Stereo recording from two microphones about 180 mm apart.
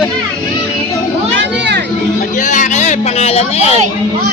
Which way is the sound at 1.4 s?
70° right (ahead or behind).